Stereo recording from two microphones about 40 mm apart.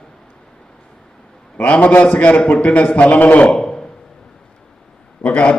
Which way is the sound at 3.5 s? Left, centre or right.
Centre.